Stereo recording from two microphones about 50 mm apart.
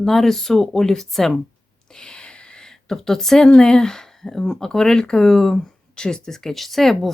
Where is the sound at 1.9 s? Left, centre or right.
Centre.